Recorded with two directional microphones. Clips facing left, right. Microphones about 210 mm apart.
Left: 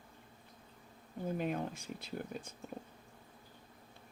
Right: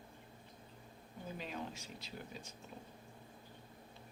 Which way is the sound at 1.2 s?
55° left (ahead or behind).